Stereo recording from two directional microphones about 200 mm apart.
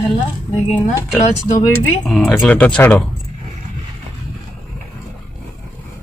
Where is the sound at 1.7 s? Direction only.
5° left (ahead or behind).